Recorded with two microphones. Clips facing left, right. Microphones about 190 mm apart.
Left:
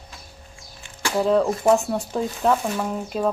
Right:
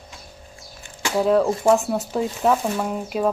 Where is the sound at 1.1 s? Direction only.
5° right (ahead or behind).